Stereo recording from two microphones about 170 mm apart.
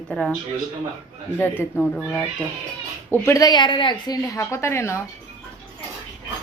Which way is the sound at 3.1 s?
15° left (ahead or behind).